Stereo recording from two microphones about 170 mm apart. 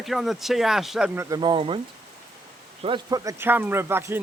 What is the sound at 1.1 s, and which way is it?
Speech, 25° right (ahead or behind).